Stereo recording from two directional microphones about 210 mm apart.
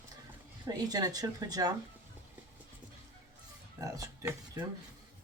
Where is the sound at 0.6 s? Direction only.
15° right (ahead or behind).